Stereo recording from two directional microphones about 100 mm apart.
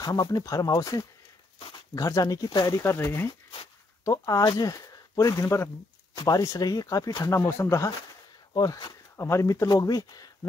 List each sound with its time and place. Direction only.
0.0 s speech: 40° left (ahead or behind)
2.8 s speech: 30° left (ahead or behind)
6.1 s speech: 40° left (ahead or behind)
7.3 s speech: 25° left (ahead or behind)
8.5 s speech: 40° left (ahead or behind)
9.1 s speech: 25° left (ahead or behind)